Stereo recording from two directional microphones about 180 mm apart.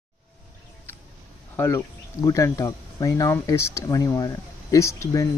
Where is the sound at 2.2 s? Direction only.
20° left (ahead or behind).